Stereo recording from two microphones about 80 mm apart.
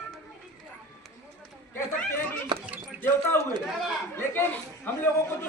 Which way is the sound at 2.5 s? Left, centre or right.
Right.